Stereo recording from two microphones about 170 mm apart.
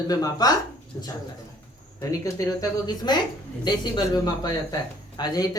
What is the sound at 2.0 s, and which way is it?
Speech, 20° left (ahead or behind).